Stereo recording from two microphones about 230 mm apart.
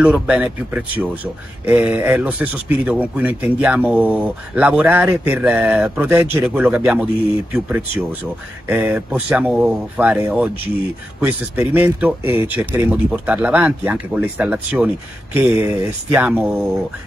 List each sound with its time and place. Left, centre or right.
0.0 s speech: centre
8.6 s speech: centre